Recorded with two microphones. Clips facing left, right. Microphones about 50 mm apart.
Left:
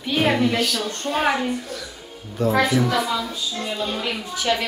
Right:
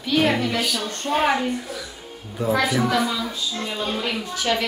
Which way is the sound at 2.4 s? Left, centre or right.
Centre.